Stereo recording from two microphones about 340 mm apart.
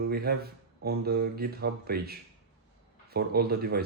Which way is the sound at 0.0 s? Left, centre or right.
Right.